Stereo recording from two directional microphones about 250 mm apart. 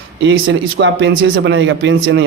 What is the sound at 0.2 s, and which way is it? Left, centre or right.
A man's voice, right.